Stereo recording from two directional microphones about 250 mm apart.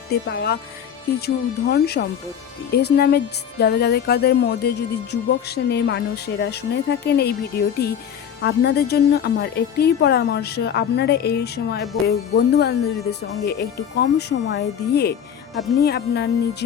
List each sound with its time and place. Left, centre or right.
0.1 s a woman's voice: left